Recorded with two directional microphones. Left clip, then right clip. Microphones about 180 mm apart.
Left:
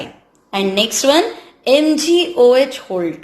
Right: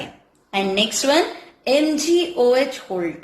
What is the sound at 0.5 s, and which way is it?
A woman's voice, 35° left (ahead or behind).